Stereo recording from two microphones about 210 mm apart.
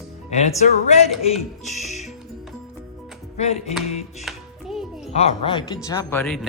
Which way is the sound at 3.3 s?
30° left (ahead or behind).